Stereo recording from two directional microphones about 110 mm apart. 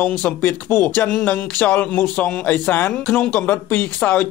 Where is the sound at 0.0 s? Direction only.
15° left (ahead or behind).